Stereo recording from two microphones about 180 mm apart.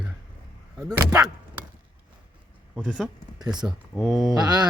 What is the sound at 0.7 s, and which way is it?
Speech, 15° right (ahead or behind).